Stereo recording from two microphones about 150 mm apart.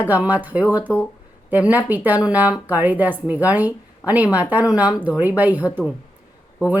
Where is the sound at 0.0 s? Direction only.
10° right (ahead or behind).